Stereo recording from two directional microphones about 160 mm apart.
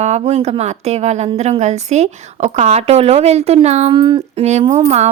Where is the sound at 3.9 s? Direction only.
30° right (ahead or behind).